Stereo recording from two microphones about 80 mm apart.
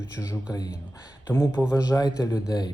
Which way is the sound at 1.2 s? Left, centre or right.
Left.